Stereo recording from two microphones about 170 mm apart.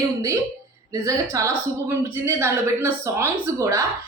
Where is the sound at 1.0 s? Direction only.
20° right (ahead or behind).